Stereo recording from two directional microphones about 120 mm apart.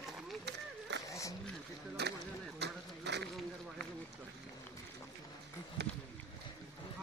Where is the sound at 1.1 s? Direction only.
25° left (ahead or behind).